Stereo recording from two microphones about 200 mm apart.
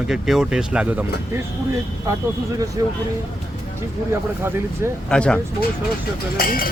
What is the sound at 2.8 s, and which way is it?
Speech, 20° right (ahead or behind).